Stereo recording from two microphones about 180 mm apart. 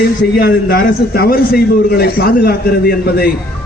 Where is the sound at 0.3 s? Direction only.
55° left (ahead or behind).